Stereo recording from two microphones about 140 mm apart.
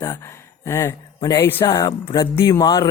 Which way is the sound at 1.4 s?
15° left (ahead or behind).